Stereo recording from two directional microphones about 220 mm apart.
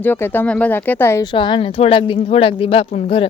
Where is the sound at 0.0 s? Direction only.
10° left (ahead or behind).